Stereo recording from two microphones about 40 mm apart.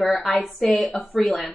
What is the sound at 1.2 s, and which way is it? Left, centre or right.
Speech, left.